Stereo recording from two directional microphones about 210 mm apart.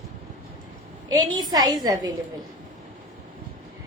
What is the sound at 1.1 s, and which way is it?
A woman's voice, 20° right (ahead or behind).